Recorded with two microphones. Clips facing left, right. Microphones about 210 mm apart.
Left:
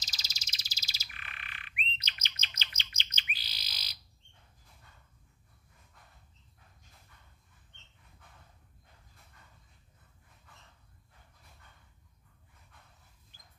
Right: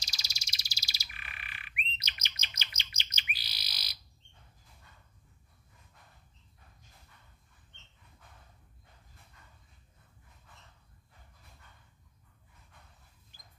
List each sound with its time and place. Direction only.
0.0 s frog: 10° right (ahead or behind)